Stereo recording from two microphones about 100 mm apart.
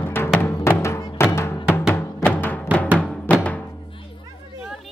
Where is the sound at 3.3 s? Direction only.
15° left (ahead or behind).